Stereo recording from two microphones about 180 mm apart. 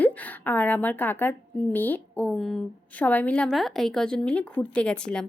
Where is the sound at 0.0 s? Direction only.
10° left (ahead or behind).